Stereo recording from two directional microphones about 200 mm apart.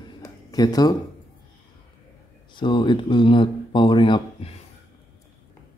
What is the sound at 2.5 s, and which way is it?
Speech, 25° left (ahead or behind).